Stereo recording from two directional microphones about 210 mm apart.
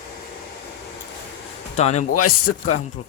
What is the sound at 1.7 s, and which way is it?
Speech, 30° left (ahead or behind).